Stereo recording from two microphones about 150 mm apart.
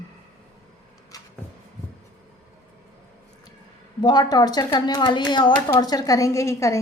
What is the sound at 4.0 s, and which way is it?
A woman's voice, 30° left (ahead or behind).